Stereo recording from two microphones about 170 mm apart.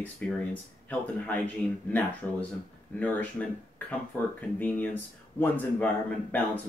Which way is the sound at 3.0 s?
10° left (ahead or behind).